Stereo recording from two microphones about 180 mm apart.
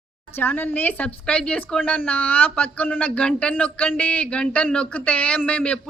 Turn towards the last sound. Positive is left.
turn(degrees=5)  # may be behind; listen again after turning